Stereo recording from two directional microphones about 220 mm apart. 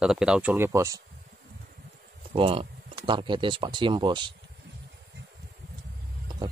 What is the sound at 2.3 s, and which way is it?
Speech, 25° right (ahead or behind).